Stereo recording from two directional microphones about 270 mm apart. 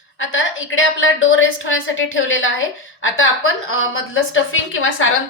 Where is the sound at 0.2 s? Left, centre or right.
Left.